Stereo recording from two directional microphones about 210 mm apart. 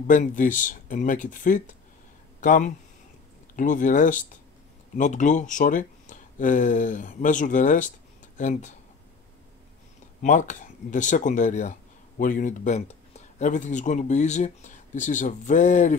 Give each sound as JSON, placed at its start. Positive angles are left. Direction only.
{"t": 0.0, "sound": "speech", "side_deg": 40}
{"t": 10.2, "sound": "speech", "side_deg": 35}